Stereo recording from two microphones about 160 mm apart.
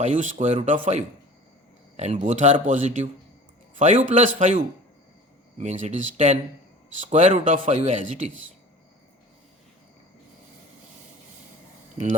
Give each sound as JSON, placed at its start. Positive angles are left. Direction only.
{"t": 0.0, "sound": "a man's voice", "side_deg": -50}